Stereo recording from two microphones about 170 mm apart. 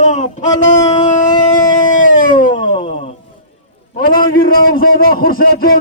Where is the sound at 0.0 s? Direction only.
45° left (ahead or behind).